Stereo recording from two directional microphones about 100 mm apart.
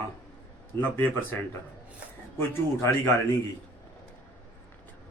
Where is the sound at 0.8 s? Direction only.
20° left (ahead or behind).